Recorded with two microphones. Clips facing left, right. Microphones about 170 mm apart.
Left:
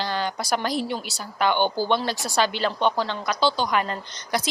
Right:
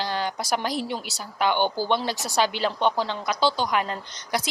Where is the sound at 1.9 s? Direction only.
15° right (ahead or behind).